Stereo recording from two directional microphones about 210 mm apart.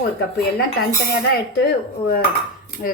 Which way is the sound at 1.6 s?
45° left (ahead or behind).